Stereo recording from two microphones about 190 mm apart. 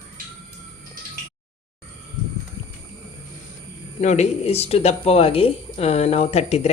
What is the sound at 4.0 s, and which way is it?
Speech, 35° left (ahead or behind).